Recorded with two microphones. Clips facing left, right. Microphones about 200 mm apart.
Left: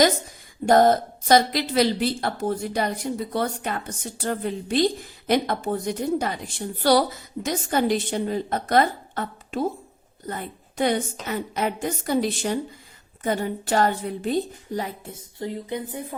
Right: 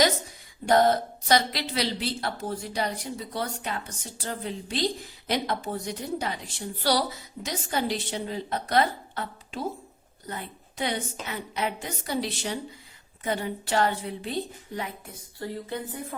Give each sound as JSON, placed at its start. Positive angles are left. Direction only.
{"t": 0.6, "sound": "speech", "side_deg": 45}
{"t": 15.0, "sound": "speech", "side_deg": 20}